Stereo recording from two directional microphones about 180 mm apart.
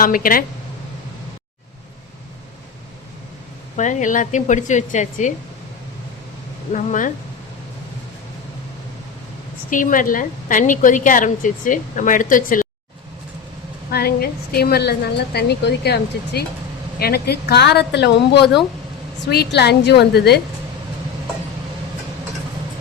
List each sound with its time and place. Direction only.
0.0 s a woman's voice: 50° left (ahead or behind)
3.8 s a woman's voice: 45° left (ahead or behind)
6.7 s a woman's voice: 45° left (ahead or behind)
9.6 s a woman's voice: 45° left (ahead or behind)
13.9 s a woman's voice: 60° left (ahead or behind)